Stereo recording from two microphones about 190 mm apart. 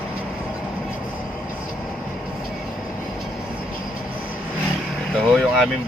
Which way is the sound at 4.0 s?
5° right (ahead or behind).